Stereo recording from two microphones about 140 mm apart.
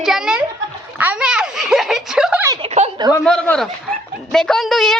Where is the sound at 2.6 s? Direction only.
50° right (ahead or behind).